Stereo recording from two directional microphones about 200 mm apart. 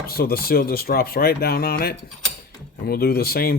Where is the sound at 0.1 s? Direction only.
50° left (ahead or behind).